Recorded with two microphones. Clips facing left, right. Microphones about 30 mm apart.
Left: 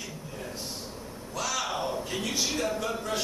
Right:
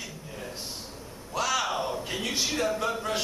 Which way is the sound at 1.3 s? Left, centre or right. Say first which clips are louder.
Right 4 dB; centre.